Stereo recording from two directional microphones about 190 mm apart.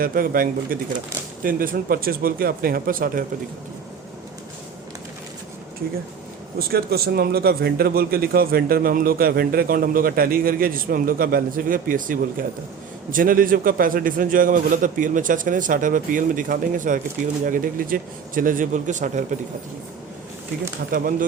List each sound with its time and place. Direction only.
0.0 s a man's voice: 50° right (ahead or behind)
6.6 s a man's voice: 55° right (ahead or behind)
20.9 s a man's voice: 45° right (ahead or behind)